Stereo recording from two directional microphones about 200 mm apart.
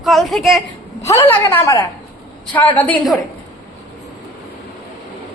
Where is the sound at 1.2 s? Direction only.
15° left (ahead or behind).